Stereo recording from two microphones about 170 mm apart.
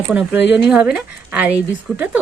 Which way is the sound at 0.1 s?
5° right (ahead or behind).